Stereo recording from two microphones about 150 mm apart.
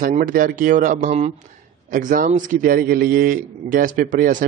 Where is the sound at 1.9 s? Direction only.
60° right (ahead or behind).